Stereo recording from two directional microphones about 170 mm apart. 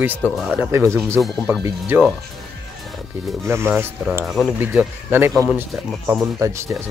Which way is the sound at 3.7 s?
10° right (ahead or behind).